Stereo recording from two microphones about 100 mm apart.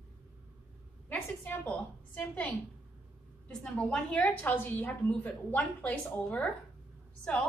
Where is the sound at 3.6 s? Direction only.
5° left (ahead or behind).